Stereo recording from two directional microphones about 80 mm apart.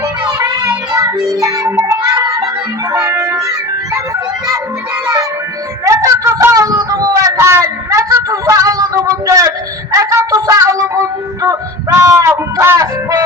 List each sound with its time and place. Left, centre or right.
0.3 s music: right
3.2 s music: centre
5.8 s music: right
6.5 s a sound: right
9.9 s music: right